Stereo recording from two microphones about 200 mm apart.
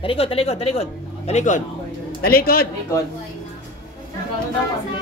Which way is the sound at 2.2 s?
50° left (ahead or behind).